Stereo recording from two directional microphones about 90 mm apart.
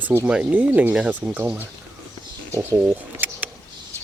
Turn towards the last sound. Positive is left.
turn(degrees=-20)  # may be behind; listen again after turning